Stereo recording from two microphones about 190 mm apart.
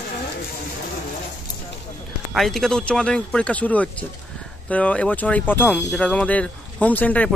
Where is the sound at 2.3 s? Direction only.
Centre (ahead or behind).